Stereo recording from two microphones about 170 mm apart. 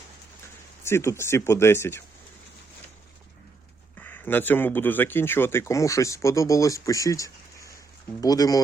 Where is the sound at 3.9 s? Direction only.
10° left (ahead or behind).